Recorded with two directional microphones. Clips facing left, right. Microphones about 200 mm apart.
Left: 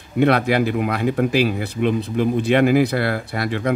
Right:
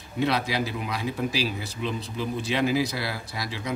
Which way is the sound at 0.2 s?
55° left (ahead or behind).